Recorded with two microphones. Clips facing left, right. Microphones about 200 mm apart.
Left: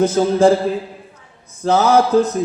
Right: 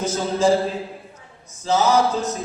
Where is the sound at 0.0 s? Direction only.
55° left (ahead or behind).